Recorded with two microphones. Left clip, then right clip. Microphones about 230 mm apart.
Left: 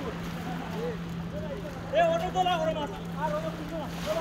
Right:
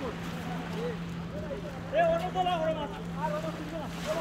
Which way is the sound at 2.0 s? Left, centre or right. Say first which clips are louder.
Left 2 dB; left.